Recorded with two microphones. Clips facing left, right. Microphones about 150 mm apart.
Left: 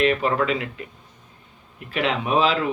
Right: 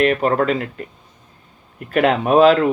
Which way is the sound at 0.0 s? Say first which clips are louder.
Right 4 dB; 45° right (ahead or behind).